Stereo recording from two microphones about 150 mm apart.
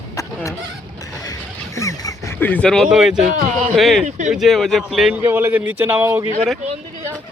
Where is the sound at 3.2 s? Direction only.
55° right (ahead or behind).